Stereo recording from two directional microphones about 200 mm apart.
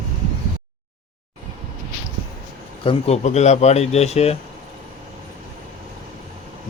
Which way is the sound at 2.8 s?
30° left (ahead or behind).